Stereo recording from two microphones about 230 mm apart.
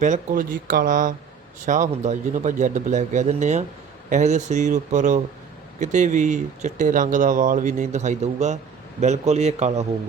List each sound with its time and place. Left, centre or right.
0.0 s a man's voice: right